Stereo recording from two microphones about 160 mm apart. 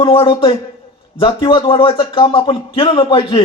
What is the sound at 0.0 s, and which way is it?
Speech, 35° left (ahead or behind).